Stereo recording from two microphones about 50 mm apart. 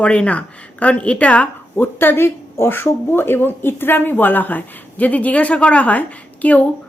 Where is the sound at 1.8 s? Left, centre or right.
Left.